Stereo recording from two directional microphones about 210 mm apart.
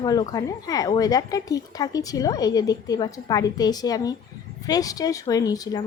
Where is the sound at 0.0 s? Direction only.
20° left (ahead or behind).